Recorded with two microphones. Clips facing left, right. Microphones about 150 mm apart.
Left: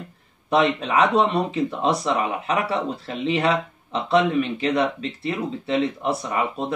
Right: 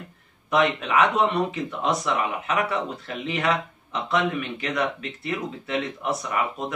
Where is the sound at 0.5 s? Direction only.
30° left (ahead or behind).